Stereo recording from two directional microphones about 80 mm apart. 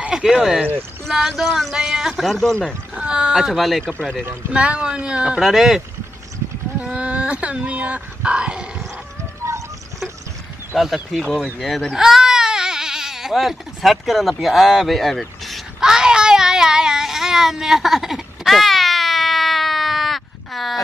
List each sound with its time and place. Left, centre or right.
0.1 s speech: centre
2.9 s a sound: centre
3.8 s speech: centre
4.3 s speech: centre
6.8 s speech: centre
10.7 s baby cry: centre